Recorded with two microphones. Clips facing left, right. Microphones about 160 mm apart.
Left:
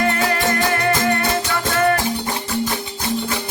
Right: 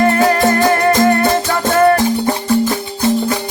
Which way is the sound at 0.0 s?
40° right (ahead or behind).